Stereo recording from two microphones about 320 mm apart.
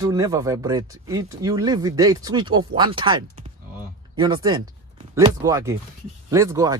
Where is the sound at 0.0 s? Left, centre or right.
Centre.